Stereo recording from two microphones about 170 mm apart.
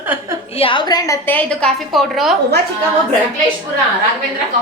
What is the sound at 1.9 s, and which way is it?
Speech, centre (ahead or behind).